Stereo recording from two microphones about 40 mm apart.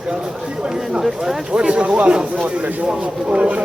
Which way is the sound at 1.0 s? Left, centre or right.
Centre.